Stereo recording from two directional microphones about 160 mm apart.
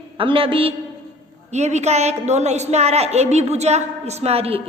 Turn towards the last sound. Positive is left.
turn(degrees=-40)  # may be behind; listen again after turning